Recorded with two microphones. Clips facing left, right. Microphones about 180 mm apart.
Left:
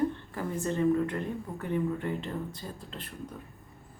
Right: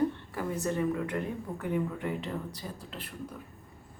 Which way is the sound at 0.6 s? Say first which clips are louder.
Left 5 dB; 10° right (ahead or behind).